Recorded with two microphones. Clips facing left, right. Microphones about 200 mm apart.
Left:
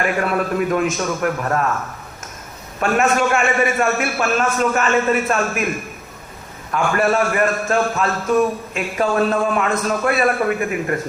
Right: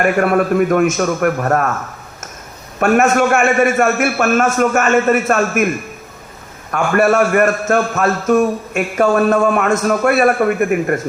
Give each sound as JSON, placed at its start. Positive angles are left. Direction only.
{"t": 0.0, "sound": "a man's voice", "side_deg": -50}
{"t": 2.8, "sound": "a man's voice", "side_deg": -45}
{"t": 6.7, "sound": "a man's voice", "side_deg": -50}